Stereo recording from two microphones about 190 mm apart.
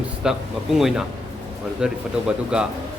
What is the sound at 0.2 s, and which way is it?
A man's voice, centre (ahead or behind).